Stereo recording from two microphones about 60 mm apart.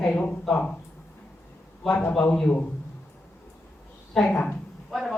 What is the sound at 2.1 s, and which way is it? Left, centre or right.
Speech, centre.